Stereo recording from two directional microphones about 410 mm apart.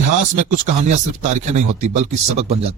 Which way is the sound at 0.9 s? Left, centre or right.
Centre.